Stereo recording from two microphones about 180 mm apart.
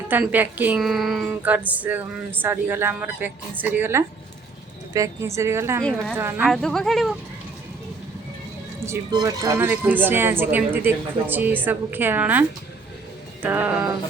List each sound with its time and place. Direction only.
0.1 s speech: 10° right (ahead or behind)
5.8 s speech: 5° left (ahead or behind)
6.1 s speech: 10° right (ahead or behind)
6.5 s speech: centre (ahead or behind)
8.8 s speech: 20° right (ahead or behind)